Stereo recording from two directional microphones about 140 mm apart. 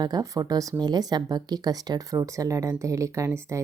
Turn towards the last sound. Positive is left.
turn(degrees=-20)  # may be behind; listen again after turning